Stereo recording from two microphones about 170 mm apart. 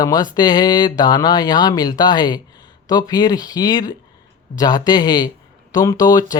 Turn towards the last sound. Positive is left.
turn(degrees=20)  # may be behind; listen again after turning